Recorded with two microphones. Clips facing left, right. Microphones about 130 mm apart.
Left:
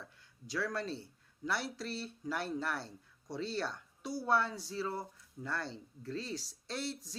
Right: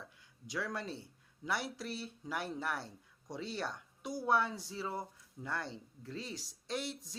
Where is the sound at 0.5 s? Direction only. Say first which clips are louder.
Left 3 dB; 15° right (ahead or behind).